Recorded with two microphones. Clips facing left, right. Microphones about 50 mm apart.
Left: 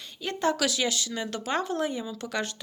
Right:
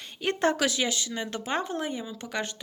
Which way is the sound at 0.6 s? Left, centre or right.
Right.